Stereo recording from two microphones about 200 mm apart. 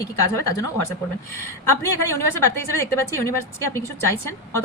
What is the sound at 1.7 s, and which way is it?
A woman's voice, 15° left (ahead or behind).